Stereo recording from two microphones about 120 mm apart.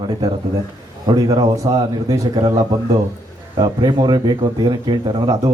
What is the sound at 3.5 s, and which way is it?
A man's voice, 35° right (ahead or behind).